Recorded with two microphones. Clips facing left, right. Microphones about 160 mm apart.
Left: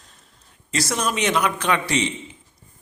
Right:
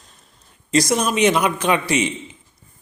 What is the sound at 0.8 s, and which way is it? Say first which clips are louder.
A man's voice: right 6 dB; 15° right (ahead or behind).